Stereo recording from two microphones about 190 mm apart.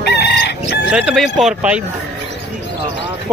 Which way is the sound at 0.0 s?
60° left (ahead or behind).